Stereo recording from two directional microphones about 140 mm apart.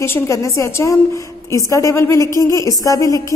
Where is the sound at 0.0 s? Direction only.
20° left (ahead or behind).